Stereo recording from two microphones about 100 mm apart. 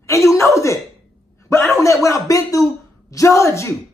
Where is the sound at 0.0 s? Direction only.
30° left (ahead or behind).